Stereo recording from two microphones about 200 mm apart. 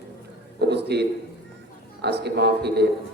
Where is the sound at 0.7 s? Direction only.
55° right (ahead or behind).